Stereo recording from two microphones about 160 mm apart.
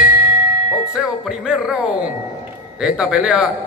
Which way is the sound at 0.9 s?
5° right (ahead or behind).